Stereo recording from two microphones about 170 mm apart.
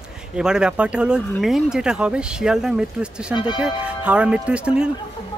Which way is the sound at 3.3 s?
25° left (ahead or behind).